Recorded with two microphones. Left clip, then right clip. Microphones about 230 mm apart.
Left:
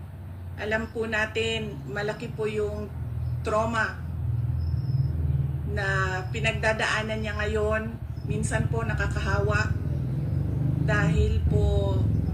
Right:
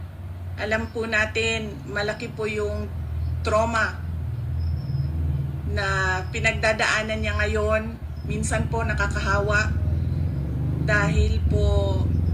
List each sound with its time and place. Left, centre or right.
0.6 s speech: right
5.7 s speech: right
10.8 s speech: right